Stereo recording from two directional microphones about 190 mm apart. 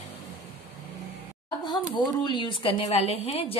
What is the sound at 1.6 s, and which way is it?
Speech, 20° left (ahead or behind).